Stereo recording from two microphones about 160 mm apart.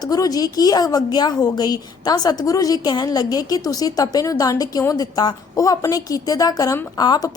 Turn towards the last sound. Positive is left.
turn(degrees=25)  # may be behind; listen again after turning